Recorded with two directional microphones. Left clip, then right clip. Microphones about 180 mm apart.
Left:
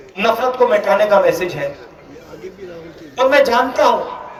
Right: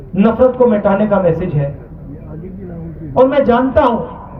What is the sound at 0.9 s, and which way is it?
Speech, 35° right (ahead or behind).